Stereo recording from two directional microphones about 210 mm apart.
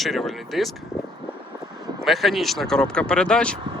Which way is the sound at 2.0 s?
Centre (ahead or behind).